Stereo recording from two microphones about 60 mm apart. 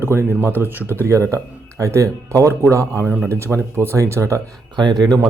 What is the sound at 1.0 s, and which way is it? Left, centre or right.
Speech, right.